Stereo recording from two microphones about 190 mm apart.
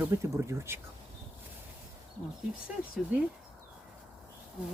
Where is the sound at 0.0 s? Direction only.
15° right (ahead or behind).